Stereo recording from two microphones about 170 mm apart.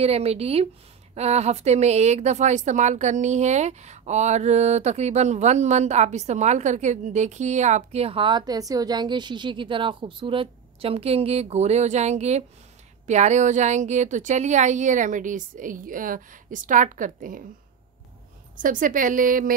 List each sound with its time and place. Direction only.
0.0 s a woman's voice: 35° right (ahead or behind)
18.6 s a woman's voice: 50° right (ahead or behind)